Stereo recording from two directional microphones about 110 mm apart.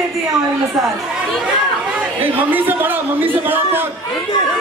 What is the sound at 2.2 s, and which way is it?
A man's voice, 15° right (ahead or behind).